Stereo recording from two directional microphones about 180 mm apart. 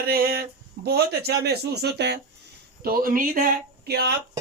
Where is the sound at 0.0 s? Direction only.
55° right (ahead or behind).